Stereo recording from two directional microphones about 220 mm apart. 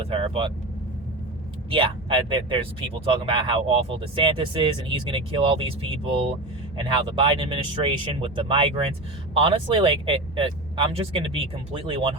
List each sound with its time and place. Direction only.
0.0 s vehicle: 25° right (ahead or behind)
1.7 s speech: 25° right (ahead or behind)